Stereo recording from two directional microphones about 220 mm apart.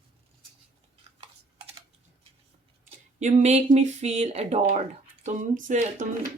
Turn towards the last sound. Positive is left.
turn(degrees=-35)  # may be behind; listen again after turning